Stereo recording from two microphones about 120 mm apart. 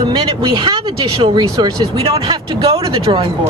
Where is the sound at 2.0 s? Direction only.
55° right (ahead or behind).